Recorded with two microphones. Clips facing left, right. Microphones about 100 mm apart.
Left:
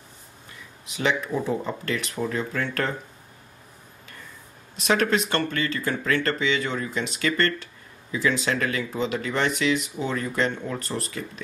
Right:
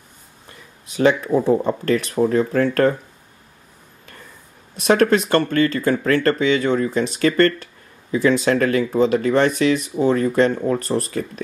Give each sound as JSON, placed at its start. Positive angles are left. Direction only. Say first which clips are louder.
{"t": 0.8, "sound": "speech", "louder": "right 9 dB", "side_deg": -40}
{"t": 4.7, "sound": "speech", "louder": "right 7 dB", "side_deg": -45}